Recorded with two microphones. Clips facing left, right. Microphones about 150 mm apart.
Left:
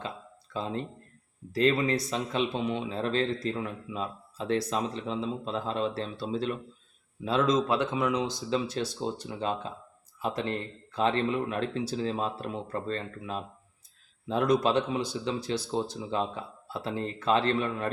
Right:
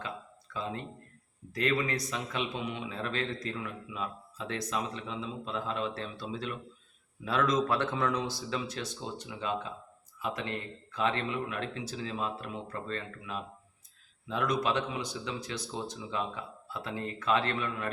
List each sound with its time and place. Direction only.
0.5 s speech: 30° left (ahead or behind)
7.3 s speech: 25° left (ahead or behind)
8.4 s speech: 30° left (ahead or behind)